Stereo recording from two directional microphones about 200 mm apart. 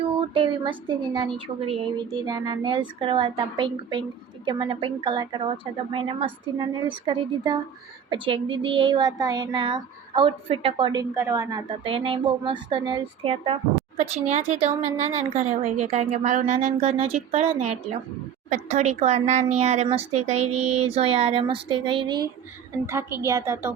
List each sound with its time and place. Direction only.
0.0 s a woman's voice: 25° right (ahead or behind)